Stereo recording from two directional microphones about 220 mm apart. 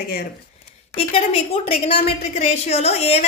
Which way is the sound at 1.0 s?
25° left (ahead or behind).